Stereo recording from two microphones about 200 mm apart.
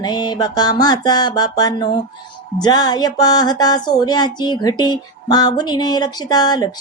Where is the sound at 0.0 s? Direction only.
20° left (ahead or behind).